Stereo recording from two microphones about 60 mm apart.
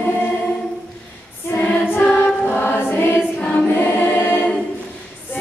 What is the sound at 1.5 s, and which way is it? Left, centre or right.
Choir, left.